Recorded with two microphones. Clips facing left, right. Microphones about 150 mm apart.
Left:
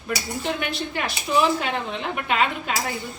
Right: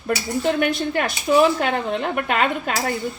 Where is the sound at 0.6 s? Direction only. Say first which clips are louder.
Right 7 dB; 45° right (ahead or behind).